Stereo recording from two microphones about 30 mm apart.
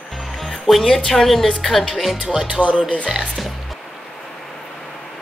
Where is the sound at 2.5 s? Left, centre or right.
Right.